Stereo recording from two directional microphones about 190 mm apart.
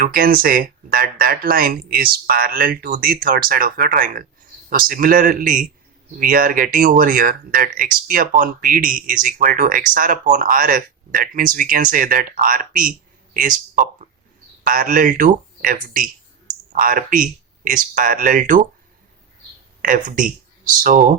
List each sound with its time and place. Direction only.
0.0 s a man's voice: 50° right (ahead or behind)
20.1 s speech: 45° right (ahead or behind)